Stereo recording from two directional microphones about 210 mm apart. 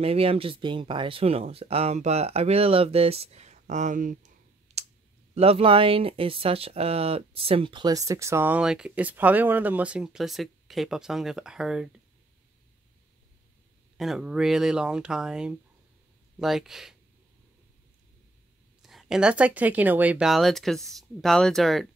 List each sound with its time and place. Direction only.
0.0 s speech: 25° right (ahead or behind)
4.8 s clicking: 30° right (ahead or behind)
5.3 s speech: 30° right (ahead or behind); by 11.9 s 5° right (ahead or behind)
13.9 s speech: centre (ahead or behind)
18.8 s speech: centre (ahead or behind)